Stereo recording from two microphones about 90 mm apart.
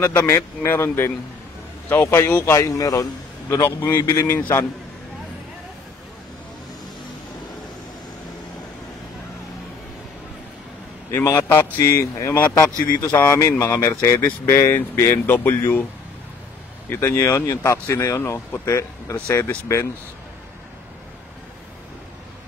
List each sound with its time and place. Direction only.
0.2 s a man's voice: 35° left (ahead or behind)
3.6 s a man's voice: 25° left (ahead or behind)
4.0 s speech: 35° left (ahead or behind)
11.1 s a man's voice: 30° left (ahead or behind)
16.9 s speech: 30° left (ahead or behind)